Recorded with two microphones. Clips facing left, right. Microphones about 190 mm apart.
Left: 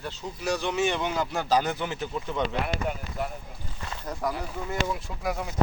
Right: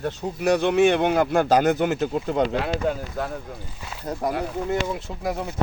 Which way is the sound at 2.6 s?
90° right.